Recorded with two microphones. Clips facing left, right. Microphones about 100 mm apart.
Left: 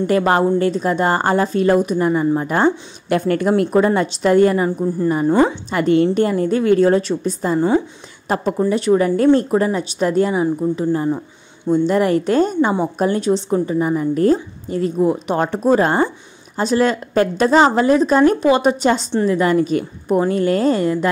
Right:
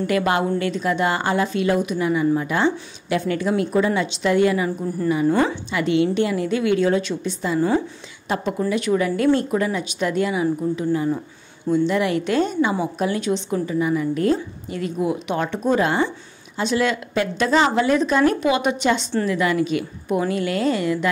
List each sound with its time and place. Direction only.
0.0 s a woman's voice: 35° left (ahead or behind)
4.6 s a woman's voice: 20° left (ahead or behind)
5.0 s a woman's voice: 40° left (ahead or behind)
5.3 s a woman's voice: 25° left (ahead or behind)
5.7 s a woman's voice: 45° left (ahead or behind)